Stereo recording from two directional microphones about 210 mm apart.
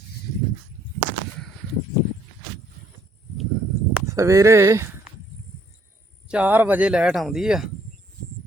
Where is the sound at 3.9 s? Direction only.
15° right (ahead or behind).